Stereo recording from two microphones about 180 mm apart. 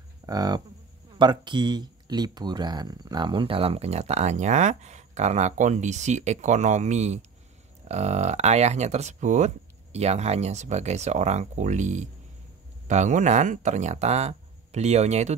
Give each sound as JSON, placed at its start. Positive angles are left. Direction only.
{"t": 0.3, "sound": "speech", "side_deg": -20}